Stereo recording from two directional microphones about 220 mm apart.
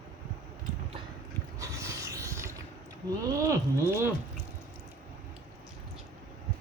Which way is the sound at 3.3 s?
15° right (ahead or behind).